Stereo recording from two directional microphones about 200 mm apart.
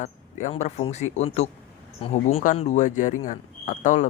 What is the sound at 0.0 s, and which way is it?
Speech, 35° left (ahead or behind).